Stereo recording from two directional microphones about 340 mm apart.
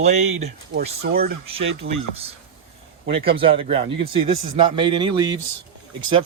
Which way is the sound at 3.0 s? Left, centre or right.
Centre.